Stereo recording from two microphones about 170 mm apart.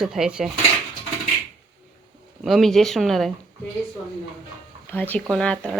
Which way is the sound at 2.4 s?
Centre (ahead or behind).